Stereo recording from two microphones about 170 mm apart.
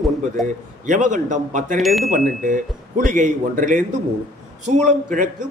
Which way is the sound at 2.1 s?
50° right (ahead or behind).